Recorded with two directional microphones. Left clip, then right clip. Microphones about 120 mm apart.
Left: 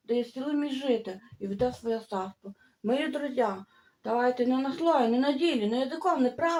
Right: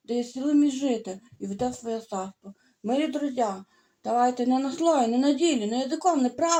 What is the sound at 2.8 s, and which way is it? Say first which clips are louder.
Speech: right 2 dB; 30° right (ahead or behind).